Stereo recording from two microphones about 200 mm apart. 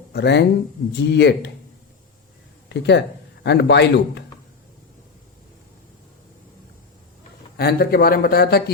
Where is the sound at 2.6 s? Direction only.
60° left (ahead or behind).